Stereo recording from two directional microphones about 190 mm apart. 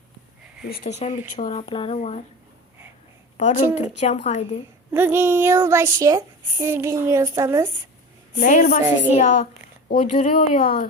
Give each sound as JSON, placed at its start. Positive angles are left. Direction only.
{"t": 0.9, "sound": "speech", "side_deg": 35}
{"t": 1.6, "sound": "speech", "side_deg": 30}
{"t": 3.3, "sound": "a woman's voice", "side_deg": 35}
{"t": 3.6, "sound": "speech", "side_deg": -10}
{"t": 4.0, "sound": "speech", "side_deg": 35}
{"t": 4.9, "sound": "speech", "side_deg": -10}
{"t": 8.4, "sound": "speech", "side_deg": 40}